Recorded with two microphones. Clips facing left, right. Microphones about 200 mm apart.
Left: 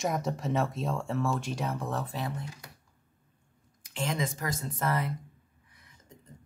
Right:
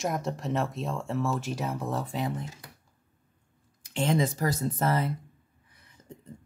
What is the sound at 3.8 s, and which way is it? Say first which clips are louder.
Speech: right 6 dB; 30° right (ahead or behind).